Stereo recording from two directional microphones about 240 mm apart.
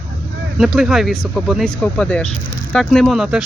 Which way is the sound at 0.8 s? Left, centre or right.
Centre.